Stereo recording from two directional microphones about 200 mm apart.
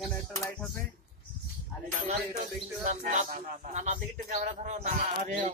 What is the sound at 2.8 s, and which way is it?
A man's voice, 35° right (ahead or behind).